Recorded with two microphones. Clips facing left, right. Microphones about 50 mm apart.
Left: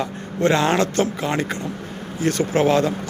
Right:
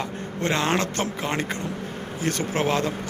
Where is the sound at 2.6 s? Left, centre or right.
Centre.